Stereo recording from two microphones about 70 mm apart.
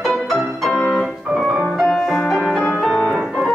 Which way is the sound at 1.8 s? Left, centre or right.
Centre.